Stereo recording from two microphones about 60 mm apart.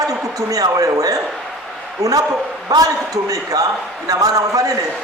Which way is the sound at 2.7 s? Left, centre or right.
Right.